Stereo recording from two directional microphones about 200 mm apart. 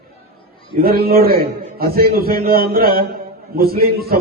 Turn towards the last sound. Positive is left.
turn(degrees=-50)  # may be behind; listen again after turning